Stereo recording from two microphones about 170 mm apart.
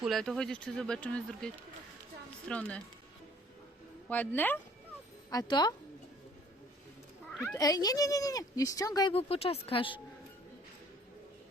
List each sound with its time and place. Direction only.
0.0 s speech: centre (ahead or behind)
2.5 s speech: 5° left (ahead or behind)
4.1 s speech: 10° left (ahead or behind)
5.3 s speech: 25° left (ahead or behind)
7.3 s cat: centre (ahead or behind)
7.5 s speech: 20° left (ahead or behind)
9.1 s speech: 35° left (ahead or behind)